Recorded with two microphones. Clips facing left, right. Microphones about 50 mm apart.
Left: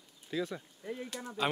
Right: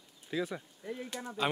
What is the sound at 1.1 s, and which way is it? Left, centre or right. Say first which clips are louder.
Speech: right 1 dB; centre.